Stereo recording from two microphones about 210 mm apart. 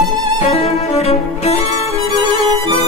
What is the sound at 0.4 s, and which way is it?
Music, 30° left (ahead or behind).